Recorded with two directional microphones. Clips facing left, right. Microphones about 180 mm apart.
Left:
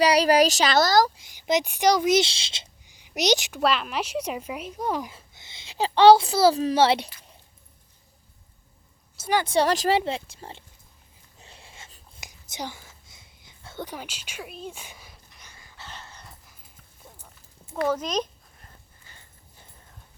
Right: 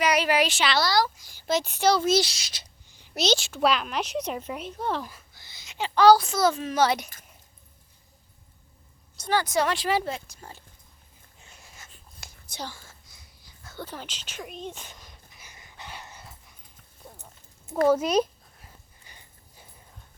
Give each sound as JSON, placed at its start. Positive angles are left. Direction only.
{"t": 0.0, "sound": "speech", "side_deg": 35}
{"t": 1.2, "sound": "a woman's voice", "side_deg": 15}
{"t": 3.0, "sound": "a woman's voice", "side_deg": 15}
{"t": 3.6, "sound": "a woman's voice", "side_deg": 0}
{"t": 5.1, "sound": "a woman's voice", "side_deg": 25}
{"t": 9.3, "sound": "speech", "side_deg": 25}
{"t": 9.9, "sound": "speech", "side_deg": 25}
{"t": 11.3, "sound": "dog", "side_deg": 30}
{"t": 12.2, "sound": "whispering", "side_deg": 15}
{"t": 15.4, "sound": "dog", "side_deg": -20}
{"t": 16.2, "sound": "dog", "side_deg": 0}
{"t": 17.0, "sound": "a sound", "side_deg": -10}